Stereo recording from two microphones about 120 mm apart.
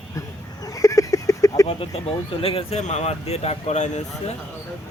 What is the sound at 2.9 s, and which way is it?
Speech, 65° left (ahead or behind).